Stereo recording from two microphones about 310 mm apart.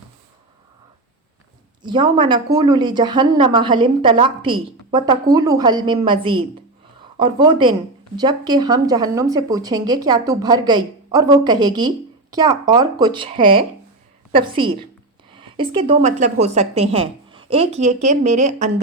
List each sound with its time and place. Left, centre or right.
1.8 s speech: centre